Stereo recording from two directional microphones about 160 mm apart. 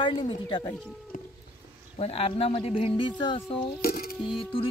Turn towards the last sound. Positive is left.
turn(degrees=35)  # may be behind; listen again after turning